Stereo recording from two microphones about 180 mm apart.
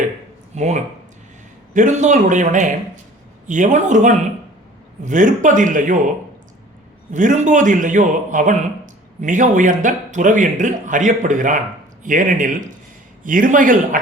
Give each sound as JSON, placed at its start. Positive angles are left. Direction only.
{"t": 0.5, "sound": "speech", "side_deg": -40}
{"t": 7.1, "sound": "speech", "side_deg": -45}